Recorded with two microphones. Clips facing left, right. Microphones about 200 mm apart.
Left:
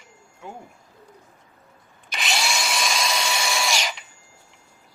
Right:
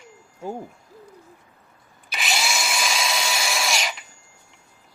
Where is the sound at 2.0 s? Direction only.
Centre (ahead or behind).